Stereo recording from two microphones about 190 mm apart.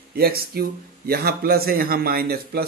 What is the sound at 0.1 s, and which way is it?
A man's voice, 55° right (ahead or behind).